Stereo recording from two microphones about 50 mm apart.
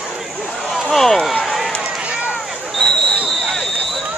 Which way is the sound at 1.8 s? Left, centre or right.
Centre.